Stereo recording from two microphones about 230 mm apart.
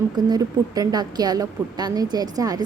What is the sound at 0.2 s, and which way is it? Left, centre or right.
A woman's voice, centre.